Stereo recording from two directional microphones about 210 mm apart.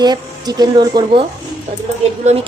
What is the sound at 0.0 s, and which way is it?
A woman's voice, 20° right (ahead or behind).